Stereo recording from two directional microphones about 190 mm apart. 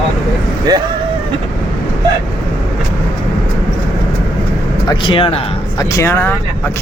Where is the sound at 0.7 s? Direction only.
20° right (ahead or behind).